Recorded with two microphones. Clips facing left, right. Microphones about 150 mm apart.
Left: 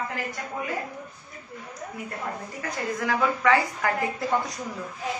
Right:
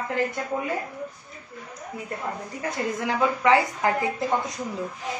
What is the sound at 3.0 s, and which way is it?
Speech, 25° right (ahead or behind).